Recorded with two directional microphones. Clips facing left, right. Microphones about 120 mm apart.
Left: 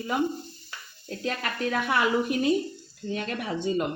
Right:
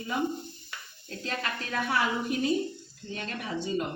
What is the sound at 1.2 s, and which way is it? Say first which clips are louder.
A woman's voice: left 5 dB; 60° left (ahead or behind).